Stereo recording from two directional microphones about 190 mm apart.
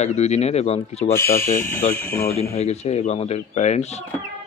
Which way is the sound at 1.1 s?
15° left (ahead or behind).